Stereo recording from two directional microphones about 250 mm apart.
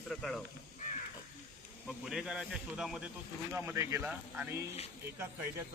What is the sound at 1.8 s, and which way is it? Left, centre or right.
Speech, centre.